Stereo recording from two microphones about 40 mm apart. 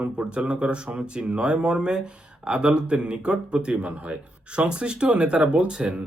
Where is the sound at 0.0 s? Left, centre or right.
Right.